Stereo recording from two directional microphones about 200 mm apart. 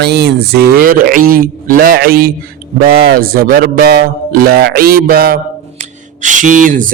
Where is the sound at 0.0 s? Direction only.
55° right (ahead or behind).